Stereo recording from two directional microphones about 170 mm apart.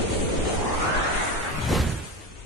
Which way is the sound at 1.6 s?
Centre (ahead or behind).